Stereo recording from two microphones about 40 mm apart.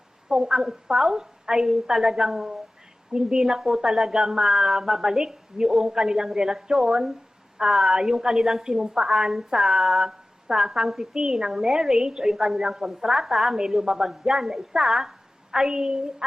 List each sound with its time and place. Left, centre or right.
0.3 s speech: centre